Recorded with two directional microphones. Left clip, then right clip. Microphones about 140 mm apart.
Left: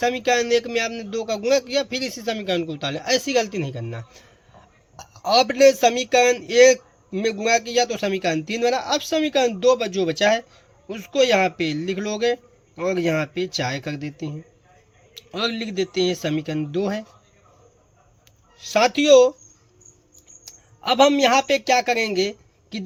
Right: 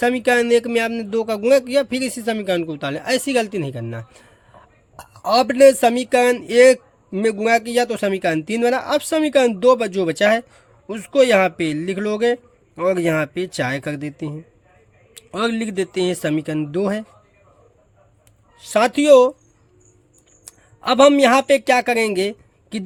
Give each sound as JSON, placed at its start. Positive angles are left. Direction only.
{"t": 0.0, "sound": "speech", "side_deg": -55}
{"t": 18.5, "sound": "speech", "side_deg": -45}
{"t": 20.4, "sound": "speech", "side_deg": -60}